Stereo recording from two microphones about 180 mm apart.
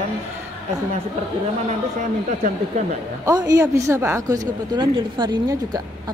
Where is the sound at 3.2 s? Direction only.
20° right (ahead or behind).